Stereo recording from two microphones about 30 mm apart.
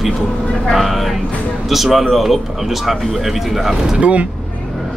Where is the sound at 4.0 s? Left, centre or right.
Right.